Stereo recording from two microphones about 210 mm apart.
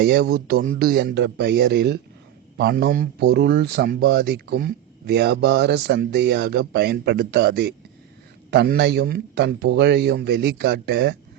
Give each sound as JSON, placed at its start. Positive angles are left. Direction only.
{"t": 0.0, "sound": "speech", "side_deg": -50}